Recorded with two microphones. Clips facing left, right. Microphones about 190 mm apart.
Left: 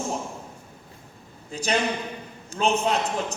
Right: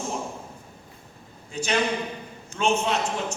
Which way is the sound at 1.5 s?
35° left (ahead or behind).